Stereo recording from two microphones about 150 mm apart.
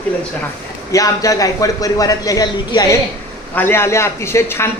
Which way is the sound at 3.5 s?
15° left (ahead or behind).